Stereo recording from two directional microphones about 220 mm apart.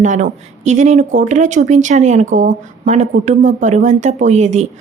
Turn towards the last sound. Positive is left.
turn(degrees=-30)  # may be behind; listen again after turning